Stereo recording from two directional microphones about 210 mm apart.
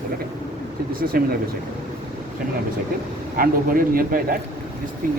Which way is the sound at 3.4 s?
45° right (ahead or behind).